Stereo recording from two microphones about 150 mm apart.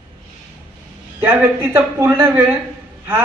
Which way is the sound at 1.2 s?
15° right (ahead or behind).